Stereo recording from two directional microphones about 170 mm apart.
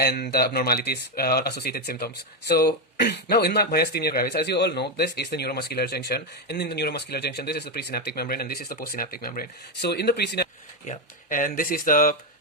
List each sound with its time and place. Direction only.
0.0 s speech: 65° left (ahead or behind)
10.8 s speech: 45° left (ahead or behind)